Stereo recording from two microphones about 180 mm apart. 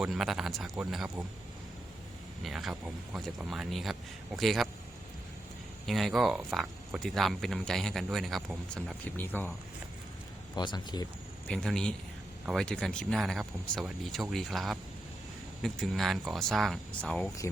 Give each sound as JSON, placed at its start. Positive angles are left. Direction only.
{"t": 0.0, "sound": "speech", "side_deg": 0}
{"t": 2.4, "sound": "speech", "side_deg": 0}
{"t": 5.8, "sound": "speech", "side_deg": 0}
{"t": 10.5, "sound": "speech", "side_deg": 25}
{"t": 11.4, "sound": "speech", "side_deg": 5}